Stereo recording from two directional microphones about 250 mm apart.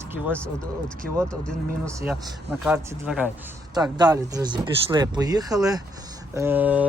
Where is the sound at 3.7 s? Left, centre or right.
Centre.